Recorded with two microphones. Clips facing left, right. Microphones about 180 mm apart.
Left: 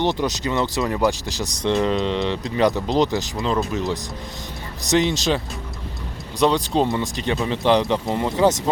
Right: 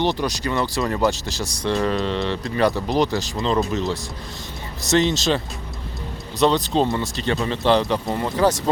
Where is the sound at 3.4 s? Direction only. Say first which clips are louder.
Right 2 dB; 5° left (ahead or behind).